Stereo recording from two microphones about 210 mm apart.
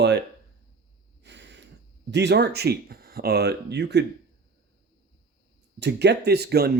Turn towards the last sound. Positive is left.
turn(degrees=-50)  # may be behind; listen again after turning